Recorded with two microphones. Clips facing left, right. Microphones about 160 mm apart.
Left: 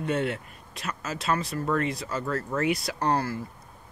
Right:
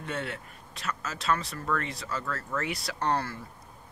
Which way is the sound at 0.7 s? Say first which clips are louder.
Left 2 dB; 15° left (ahead or behind).